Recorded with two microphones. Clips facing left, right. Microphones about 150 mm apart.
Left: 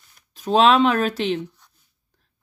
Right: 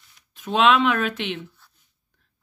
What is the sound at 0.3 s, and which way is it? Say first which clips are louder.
Speech: left 3 dB; 35° left (ahead or behind).